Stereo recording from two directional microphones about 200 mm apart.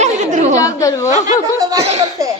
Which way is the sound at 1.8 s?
30° right (ahead or behind).